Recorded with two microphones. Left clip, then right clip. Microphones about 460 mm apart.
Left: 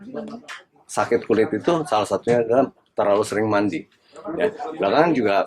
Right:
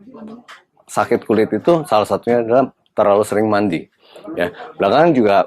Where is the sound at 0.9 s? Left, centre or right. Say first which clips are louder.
Right 4 dB; right.